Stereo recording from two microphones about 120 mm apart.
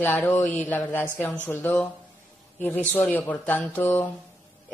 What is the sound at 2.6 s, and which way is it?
Speech, 15° left (ahead or behind).